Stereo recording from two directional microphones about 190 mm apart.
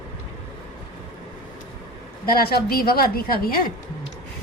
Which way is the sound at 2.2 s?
50° left (ahead or behind).